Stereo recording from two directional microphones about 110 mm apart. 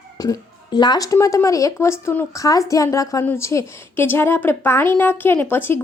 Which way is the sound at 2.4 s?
30° left (ahead or behind).